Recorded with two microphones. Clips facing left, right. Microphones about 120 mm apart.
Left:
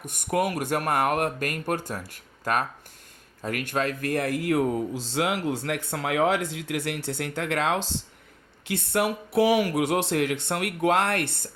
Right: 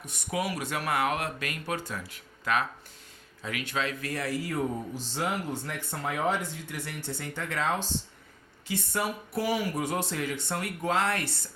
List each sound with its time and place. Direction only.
0.0 s speech: 55° left (ahead or behind)
5.1 s speech: 90° left
8.6 s speech: 65° left (ahead or behind)